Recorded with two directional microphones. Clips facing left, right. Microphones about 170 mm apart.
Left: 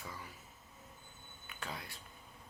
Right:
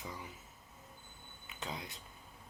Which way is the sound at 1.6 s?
20° right (ahead or behind).